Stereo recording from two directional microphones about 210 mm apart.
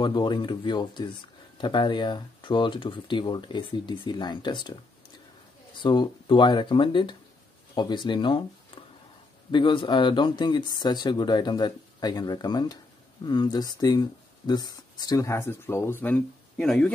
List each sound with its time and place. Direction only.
0.0 s speech: 20° left (ahead or behind)
5.8 s speech: 20° left (ahead or behind); by 16.9 s 5° left (ahead or behind)